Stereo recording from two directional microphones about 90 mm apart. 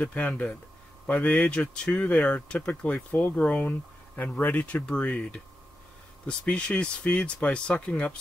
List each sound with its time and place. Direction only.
0.0 s speech: 15° left (ahead or behind)